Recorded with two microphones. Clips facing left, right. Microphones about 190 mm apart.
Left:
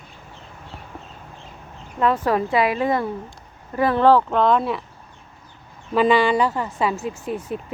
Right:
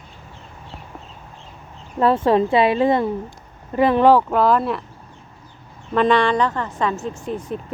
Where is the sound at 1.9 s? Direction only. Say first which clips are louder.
Right 4 dB; 30° right (ahead or behind); by 4.8 s centre (ahead or behind).